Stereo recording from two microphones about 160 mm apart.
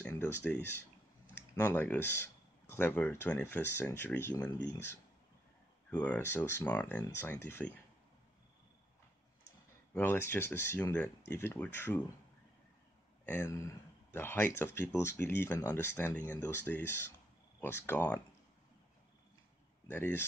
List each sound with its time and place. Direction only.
0.0 s speech: 10° left (ahead or behind)
5.9 s speech: 10° left (ahead or behind)
9.9 s speech: 15° left (ahead or behind)
13.2 s speech: 15° left (ahead or behind)
19.9 s speech: 15° left (ahead or behind)